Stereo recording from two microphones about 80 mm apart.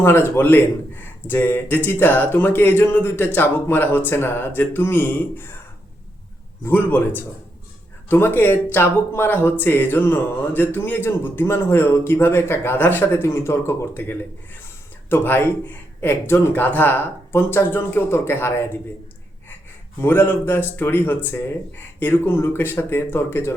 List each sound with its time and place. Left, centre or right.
0.0 s speech: left
6.7 s speech: left
20.0 s speech: left